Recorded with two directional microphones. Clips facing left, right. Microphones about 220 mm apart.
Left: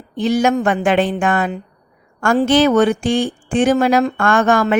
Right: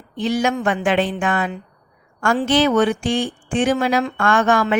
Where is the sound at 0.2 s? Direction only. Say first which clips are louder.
Left 4 dB; 45° left (ahead or behind).